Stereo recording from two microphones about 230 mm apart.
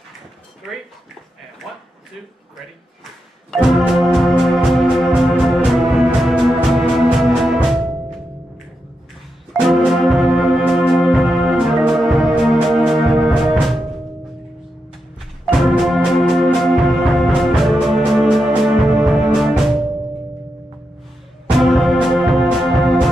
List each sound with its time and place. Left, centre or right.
3.5 s music: centre
9.5 s music: centre
15.4 s music: centre
21.6 s music: centre